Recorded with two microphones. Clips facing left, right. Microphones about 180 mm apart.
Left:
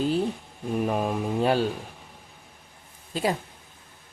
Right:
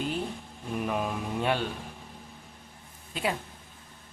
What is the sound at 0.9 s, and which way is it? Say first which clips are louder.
Speech: left 3 dB; 40° left (ahead or behind).